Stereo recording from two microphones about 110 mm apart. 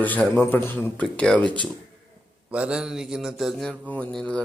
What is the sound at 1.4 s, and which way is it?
Speech, 45° right (ahead or behind).